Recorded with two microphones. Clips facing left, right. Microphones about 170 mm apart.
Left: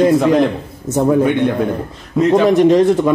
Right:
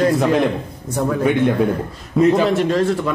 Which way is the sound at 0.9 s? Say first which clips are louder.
Left 6 dB; 25° left (ahead or behind).